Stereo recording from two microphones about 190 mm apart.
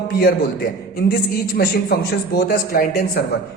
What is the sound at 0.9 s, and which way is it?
A man's voice, 55° left (ahead or behind).